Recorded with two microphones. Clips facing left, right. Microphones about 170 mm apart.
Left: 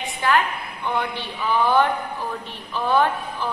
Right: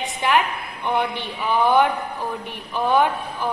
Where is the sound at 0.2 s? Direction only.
20° right (ahead or behind).